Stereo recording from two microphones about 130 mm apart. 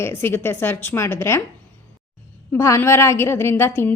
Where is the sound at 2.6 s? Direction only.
20° left (ahead or behind).